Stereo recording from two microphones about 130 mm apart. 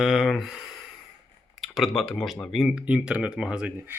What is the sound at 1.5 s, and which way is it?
Speech, centre (ahead or behind).